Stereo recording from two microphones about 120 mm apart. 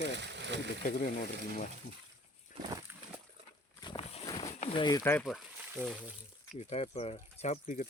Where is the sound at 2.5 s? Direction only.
90° left.